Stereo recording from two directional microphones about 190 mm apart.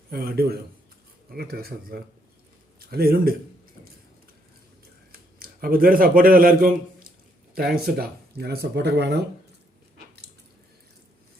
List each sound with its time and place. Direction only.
0.1 s speech: 55° right (ahead or behind)
5.4 s a man's voice: 50° right (ahead or behind)